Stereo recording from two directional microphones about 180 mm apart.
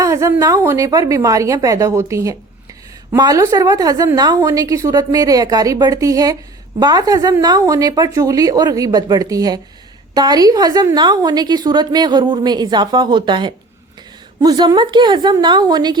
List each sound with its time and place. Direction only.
0.0 s a woman's voice: 15° right (ahead or behind)